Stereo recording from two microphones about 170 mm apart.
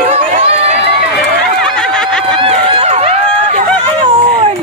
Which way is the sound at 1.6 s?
5° left (ahead or behind).